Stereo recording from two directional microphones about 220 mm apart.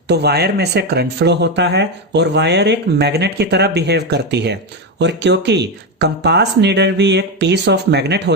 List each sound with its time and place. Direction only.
0.1 s speech: 50° right (ahead or behind)